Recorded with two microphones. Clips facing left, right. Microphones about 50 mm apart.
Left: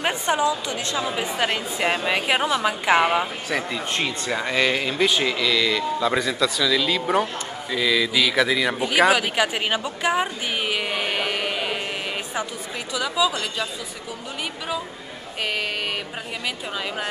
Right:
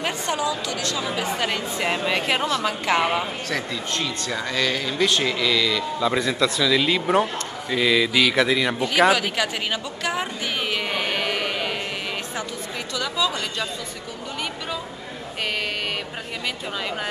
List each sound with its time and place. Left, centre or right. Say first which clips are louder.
0.0 s speech: left 3 dB; left; by 8.7 s centre
8.7 s speech: left 1 dB; centre
10.7 s carnatic music: right 1 dB; centre
12.9 s speech: left 2 dB; centre